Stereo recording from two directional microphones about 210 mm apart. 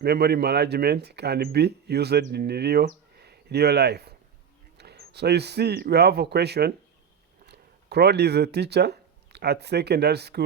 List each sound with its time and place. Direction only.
0.0 s speech: 50° right (ahead or behind)